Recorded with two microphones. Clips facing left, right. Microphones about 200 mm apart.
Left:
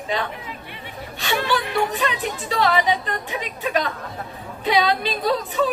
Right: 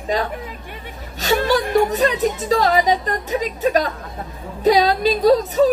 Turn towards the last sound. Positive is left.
turn(degrees=-40)  # may be behind; listen again after turning